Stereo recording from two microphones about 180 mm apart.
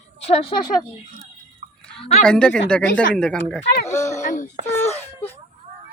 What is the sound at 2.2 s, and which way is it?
Speech, 5° left (ahead or behind).